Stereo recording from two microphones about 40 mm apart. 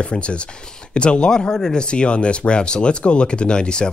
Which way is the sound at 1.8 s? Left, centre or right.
Left.